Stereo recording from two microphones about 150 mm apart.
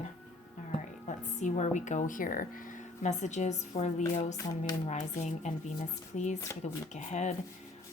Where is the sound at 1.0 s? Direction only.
55° left (ahead or behind).